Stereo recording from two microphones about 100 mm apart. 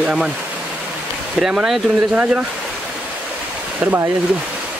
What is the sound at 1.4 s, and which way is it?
Speech, 5° right (ahead or behind).